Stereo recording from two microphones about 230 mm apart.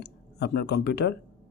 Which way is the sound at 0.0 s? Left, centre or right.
Left.